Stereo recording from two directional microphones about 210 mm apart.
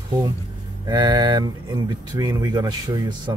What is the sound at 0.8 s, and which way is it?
Speech, 20° right (ahead or behind).